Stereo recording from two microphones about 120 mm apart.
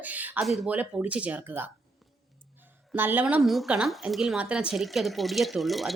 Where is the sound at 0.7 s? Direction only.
15° right (ahead or behind).